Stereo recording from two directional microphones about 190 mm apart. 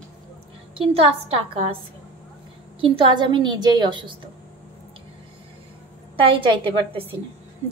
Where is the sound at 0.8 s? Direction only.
30° right (ahead or behind).